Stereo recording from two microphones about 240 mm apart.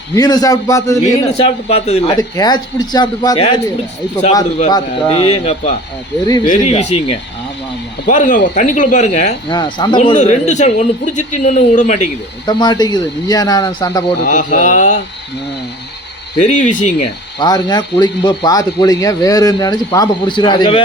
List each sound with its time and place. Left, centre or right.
0.1 s speech: centre
1.3 s speech: left
4.7 s a man's voice: left
10.0 s a man's voice: left
12.5 s speech: centre
14.3 s a man's voice: left
16.4 s speech: left
17.4 s speech: centre